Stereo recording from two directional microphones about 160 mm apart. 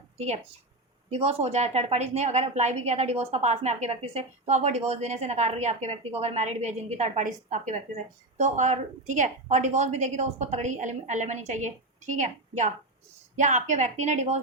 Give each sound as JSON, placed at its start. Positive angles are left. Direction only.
{"t": 1.1, "sound": "a woman's voice", "side_deg": -40}